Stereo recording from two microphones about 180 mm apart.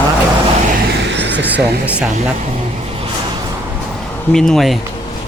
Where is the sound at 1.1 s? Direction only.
75° right (ahead or behind).